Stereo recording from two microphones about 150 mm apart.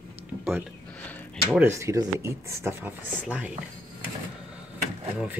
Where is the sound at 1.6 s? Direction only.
20° right (ahead or behind).